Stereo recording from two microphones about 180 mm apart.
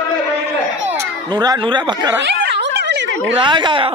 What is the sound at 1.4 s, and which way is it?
Speech, 20° right (ahead or behind).